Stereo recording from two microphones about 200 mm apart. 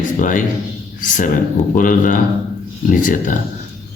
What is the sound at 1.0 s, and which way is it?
Speech, 40° left (ahead or behind).